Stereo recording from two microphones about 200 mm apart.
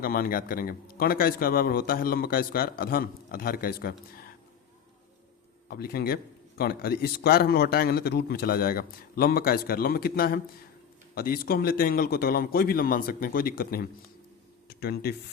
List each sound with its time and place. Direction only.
0.0 s a man's voice: 45° left (ahead or behind)
5.6 s a man's voice: 50° left (ahead or behind)